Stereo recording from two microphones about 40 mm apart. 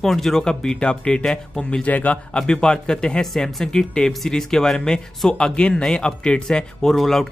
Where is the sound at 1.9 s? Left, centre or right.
Left.